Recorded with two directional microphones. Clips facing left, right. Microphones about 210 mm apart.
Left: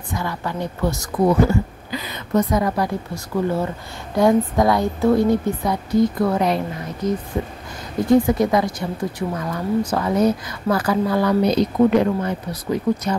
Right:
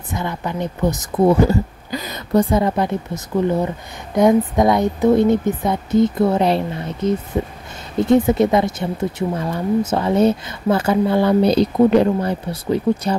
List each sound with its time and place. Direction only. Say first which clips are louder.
0.1 s speech: right 2 dB; 20° right (ahead or behind)
1.5 s a woman's voice: right 2 dB; 40° right (ahead or behind)